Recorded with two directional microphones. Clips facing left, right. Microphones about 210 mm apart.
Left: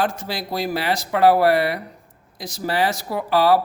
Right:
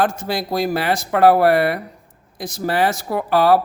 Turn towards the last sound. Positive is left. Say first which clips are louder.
# right 2 dB
turn(degrees=-50)  # may be behind; listen again after turning